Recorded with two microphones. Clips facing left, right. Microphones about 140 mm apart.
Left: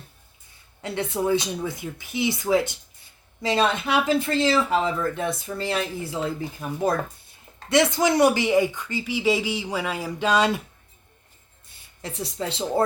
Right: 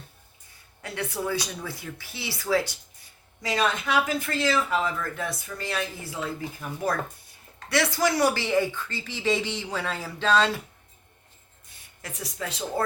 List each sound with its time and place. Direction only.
0.8 s speech: 25° left (ahead or behind)
12.0 s speech: 30° left (ahead or behind)